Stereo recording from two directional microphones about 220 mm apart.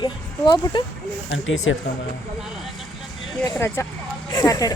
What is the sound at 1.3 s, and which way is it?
Speech, 65° left (ahead or behind).